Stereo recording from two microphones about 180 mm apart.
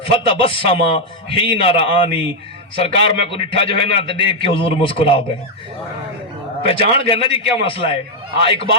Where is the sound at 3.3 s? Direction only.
30° left (ahead or behind).